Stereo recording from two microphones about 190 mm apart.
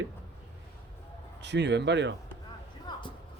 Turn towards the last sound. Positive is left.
turn(degrees=20)  # may be behind; listen again after turning